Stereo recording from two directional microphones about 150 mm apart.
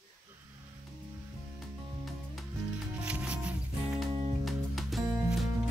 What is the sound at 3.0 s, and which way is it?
Music, 5° right (ahead or behind).